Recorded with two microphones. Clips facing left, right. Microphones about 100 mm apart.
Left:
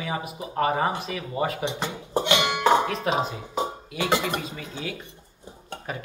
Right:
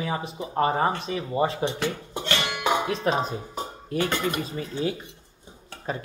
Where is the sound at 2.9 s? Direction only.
35° right (ahead or behind).